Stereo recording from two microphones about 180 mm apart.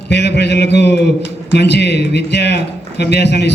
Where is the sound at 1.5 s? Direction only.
70° left (ahead or behind).